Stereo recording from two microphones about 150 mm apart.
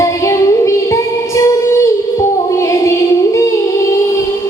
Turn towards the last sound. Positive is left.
turn(degrees=20)  # may be behind; listen again after turning